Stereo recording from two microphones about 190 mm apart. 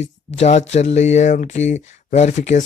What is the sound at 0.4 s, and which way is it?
Speech, 35° left (ahead or behind).